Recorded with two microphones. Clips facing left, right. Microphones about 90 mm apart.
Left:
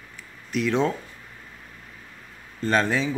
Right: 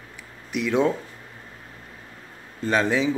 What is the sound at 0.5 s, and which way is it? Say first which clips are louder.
Speech: right 1 dB; 15° right (ahead or behind).